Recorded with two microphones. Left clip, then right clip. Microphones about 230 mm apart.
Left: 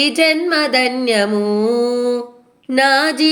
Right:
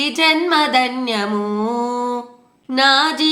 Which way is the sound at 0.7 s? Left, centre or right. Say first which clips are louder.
Left 2 dB; centre.